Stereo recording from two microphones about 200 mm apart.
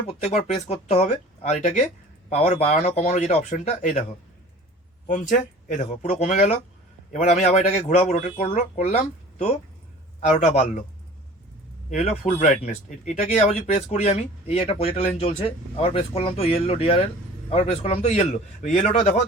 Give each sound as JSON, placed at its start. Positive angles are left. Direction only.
{"t": 0.1, "sound": "speech", "side_deg": 35}
{"t": 5.0, "sound": "speech", "side_deg": 40}
{"t": 10.2, "sound": "speech", "side_deg": 35}
{"t": 11.9, "sound": "speech", "side_deg": 35}